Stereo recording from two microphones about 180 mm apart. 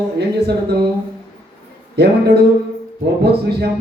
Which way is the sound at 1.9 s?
65° right (ahead or behind).